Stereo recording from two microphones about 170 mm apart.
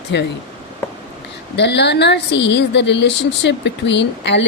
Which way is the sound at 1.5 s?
90° left.